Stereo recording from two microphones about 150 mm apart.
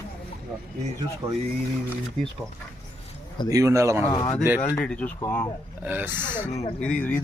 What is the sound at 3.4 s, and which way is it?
Speech, 20° right (ahead or behind).